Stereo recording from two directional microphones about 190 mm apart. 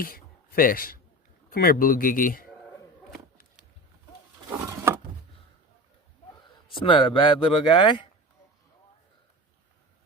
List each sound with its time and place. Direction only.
0.0 s a man's voice: 50° left (ahead or behind)
4.4 s a sound: 10° right (ahead or behind)
6.7 s speech: 25° left (ahead or behind)